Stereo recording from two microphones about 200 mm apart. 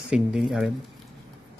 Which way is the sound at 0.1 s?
Centre (ahead or behind).